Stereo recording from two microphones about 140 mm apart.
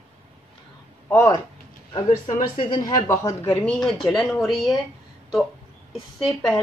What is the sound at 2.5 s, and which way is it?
Speech, 35° left (ahead or behind).